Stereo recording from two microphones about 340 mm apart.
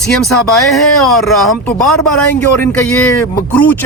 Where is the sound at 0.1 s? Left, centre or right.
Centre.